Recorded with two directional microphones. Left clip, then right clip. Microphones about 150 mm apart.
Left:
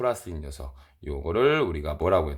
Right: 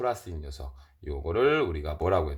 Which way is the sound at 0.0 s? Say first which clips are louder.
Left 3 dB; 35° left (ahead or behind).